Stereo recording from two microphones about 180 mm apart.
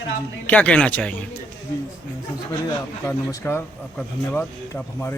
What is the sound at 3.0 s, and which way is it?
A man's voice, 15° left (ahead or behind).